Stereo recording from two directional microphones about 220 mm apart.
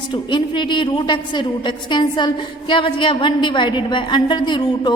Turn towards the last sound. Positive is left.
turn(degrees=20)  # may be behind; listen again after turning